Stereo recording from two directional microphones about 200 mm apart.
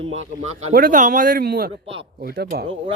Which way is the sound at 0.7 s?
45° right (ahead or behind).